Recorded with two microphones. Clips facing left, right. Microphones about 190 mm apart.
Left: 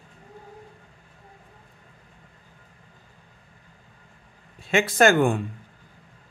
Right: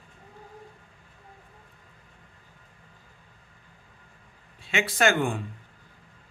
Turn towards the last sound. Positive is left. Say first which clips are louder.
# left 6 dB
turn(degrees=50)  # may be behind; listen again after turning